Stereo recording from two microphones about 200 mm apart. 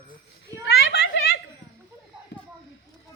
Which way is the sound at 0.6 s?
55° left (ahead or behind).